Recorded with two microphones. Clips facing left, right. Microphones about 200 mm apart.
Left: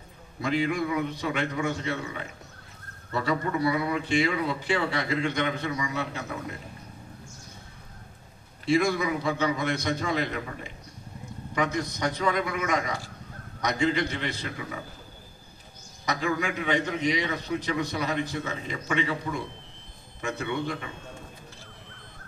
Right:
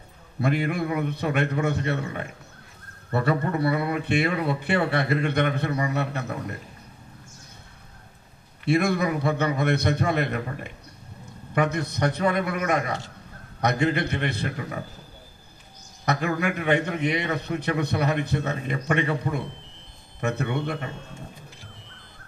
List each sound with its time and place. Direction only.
0.4 s a man's voice: 60° right (ahead or behind)
8.6 s a man's voice: 60° right (ahead or behind)
16.1 s a man's voice: 60° right (ahead or behind)